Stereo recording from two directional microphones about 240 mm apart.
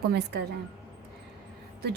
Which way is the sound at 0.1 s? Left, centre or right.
Right.